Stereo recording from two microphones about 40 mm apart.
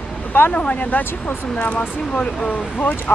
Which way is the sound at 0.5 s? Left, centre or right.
Left.